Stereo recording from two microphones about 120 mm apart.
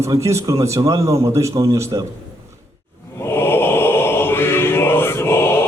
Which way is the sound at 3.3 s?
20° left (ahead or behind).